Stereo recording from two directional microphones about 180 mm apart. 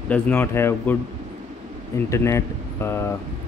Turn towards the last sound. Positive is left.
turn(degrees=15)  # may be behind; listen again after turning